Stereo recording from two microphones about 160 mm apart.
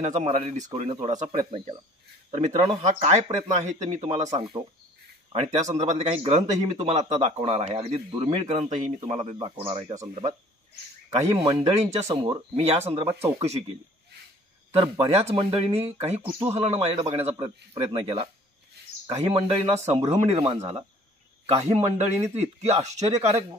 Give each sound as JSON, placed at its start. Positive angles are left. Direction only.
{"t": 0.0, "sound": "speech", "side_deg": -45}
{"t": 1.1, "sound": "speech", "side_deg": -25}
{"t": 2.3, "sound": "speech", "side_deg": -40}
{"t": 4.4, "sound": "speech", "side_deg": -30}
{"t": 7.9, "sound": "speech", "side_deg": -25}
{"t": 8.3, "sound": "speech", "side_deg": -40}
{"t": 11.3, "sound": "speech", "side_deg": -35}
{"t": 13.1, "sound": "speech", "side_deg": -15}
{"t": 14.7, "sound": "speech", "side_deg": -40}